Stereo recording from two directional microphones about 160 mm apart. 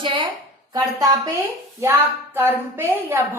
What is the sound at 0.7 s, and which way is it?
A woman's voice, 20° right (ahead or behind).